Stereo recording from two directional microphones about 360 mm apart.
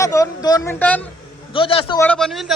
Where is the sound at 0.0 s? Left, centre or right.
Centre.